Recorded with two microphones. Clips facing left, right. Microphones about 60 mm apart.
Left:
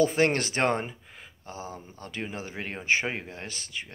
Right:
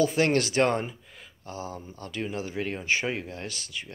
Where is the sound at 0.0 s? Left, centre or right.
Left.